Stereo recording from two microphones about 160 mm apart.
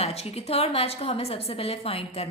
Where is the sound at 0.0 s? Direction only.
40° left (ahead or behind).